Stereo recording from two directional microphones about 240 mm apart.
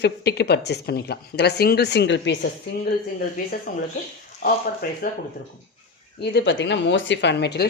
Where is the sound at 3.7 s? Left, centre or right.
Left.